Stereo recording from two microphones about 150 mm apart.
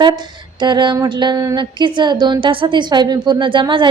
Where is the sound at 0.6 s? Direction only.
30° right (ahead or behind).